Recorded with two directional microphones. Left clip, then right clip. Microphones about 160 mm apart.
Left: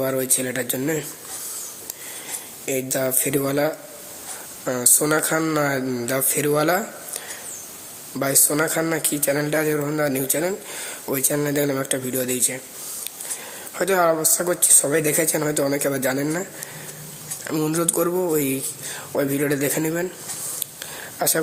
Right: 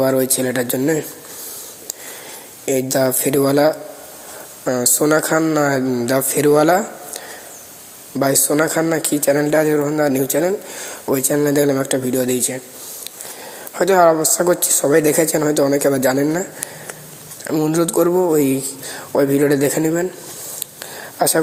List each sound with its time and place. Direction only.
0.0 s speech: 35° right (ahead or behind)
2.6 s speech: 35° right (ahead or behind)
8.2 s speech: 30° right (ahead or behind)
13.7 s speech: 30° right (ahead or behind)
17.4 s speech: 20° right (ahead or behind)
20.7 s a sound: 25° right (ahead or behind)